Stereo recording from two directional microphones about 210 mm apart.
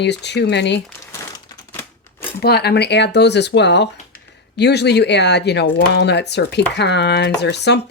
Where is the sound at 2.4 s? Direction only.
50° left (ahead or behind).